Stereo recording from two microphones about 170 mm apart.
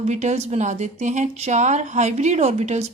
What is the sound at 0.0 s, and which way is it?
Speech, 45° right (ahead or behind).